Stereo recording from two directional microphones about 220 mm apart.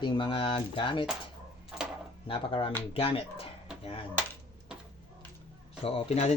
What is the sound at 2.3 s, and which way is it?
Speech, 25° left (ahead or behind).